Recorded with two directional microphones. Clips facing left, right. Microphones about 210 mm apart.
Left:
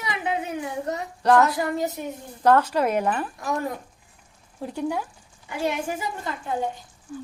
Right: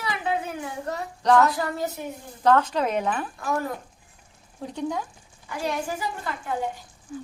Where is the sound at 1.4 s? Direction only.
15° left (ahead or behind).